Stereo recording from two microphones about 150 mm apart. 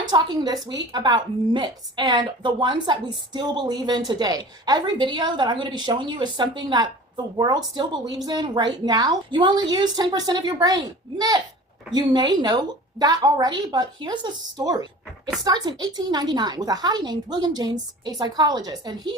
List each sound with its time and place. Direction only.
0.0 s a woman's voice: 30° right (ahead or behind)